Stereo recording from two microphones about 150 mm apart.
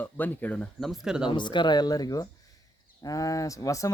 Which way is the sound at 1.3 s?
30° left (ahead or behind).